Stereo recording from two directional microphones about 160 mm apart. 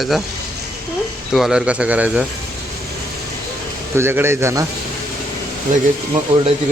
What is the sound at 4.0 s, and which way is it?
Speech, 15° right (ahead or behind).